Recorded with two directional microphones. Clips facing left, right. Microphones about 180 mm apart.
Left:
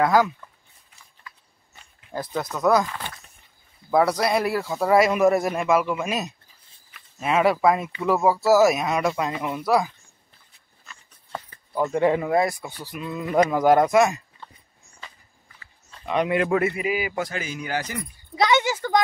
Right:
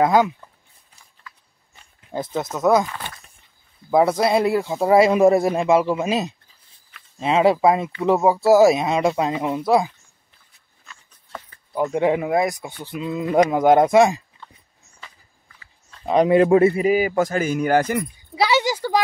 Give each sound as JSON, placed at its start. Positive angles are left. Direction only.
{"t": 0.0, "sound": "speech", "side_deg": -20}
{"t": 2.0, "sound": "speech", "side_deg": -25}
{"t": 3.9, "sound": "speech", "side_deg": -25}
{"t": 11.7, "sound": "speech", "side_deg": -15}
{"t": 16.1, "sound": "a man's voice", "side_deg": -35}
{"t": 18.3, "sound": "a sound", "side_deg": -5}